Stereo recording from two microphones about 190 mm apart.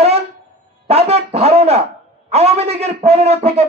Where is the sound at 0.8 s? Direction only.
30° right (ahead or behind).